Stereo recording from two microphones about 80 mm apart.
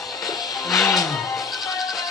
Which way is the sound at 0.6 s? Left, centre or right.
Centre.